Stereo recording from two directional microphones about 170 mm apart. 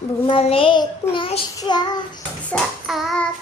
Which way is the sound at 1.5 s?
25° left (ahead or behind).